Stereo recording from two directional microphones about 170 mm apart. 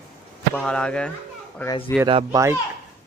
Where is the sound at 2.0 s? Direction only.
25° right (ahead or behind).